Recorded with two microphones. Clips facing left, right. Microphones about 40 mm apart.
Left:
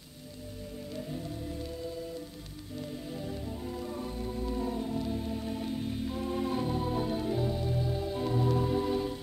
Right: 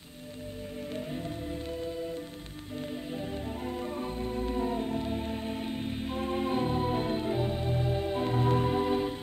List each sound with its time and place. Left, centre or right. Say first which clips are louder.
0.9 s music: right 1 dB; right
2.8 s organ: right 3 dB; right